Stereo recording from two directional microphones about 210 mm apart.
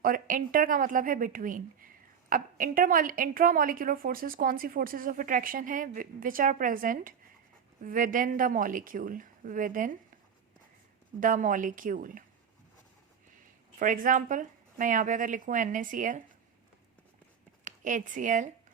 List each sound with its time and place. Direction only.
0.0 s a woman's voice: 40° right (ahead or behind)
11.2 s a woman's voice: 40° right (ahead or behind)
13.7 s a woman's voice: 40° right (ahead or behind)
17.6 s speech: 40° right (ahead or behind)